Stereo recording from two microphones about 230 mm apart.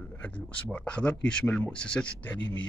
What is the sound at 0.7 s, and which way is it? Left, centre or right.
A man's voice, centre.